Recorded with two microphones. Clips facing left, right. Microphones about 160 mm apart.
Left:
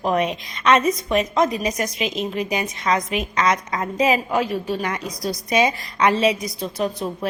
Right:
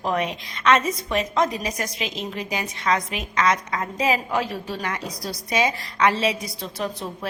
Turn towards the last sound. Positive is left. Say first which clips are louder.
# left 5 dB
turn(degrees=15)  # may be behind; listen again after turning